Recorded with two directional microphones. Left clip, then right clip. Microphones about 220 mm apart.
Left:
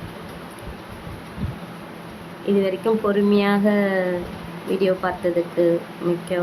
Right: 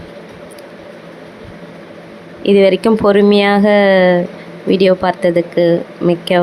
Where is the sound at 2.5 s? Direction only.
35° right (ahead or behind).